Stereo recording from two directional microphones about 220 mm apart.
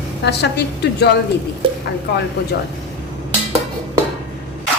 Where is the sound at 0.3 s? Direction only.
50° left (ahead or behind).